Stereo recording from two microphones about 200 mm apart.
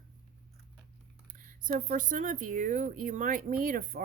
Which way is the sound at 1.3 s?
40° right (ahead or behind).